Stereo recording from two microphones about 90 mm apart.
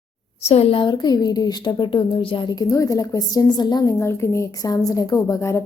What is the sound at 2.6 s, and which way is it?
A woman's voice, 40° left (ahead or behind).